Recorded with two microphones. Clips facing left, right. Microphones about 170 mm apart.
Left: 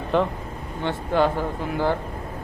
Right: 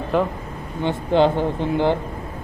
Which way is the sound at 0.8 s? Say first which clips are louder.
Right 4 dB; 20° right (ahead or behind).